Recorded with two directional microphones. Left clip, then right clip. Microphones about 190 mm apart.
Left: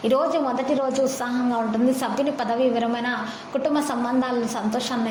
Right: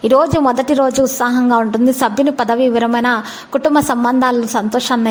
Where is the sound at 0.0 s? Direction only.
45° right (ahead or behind).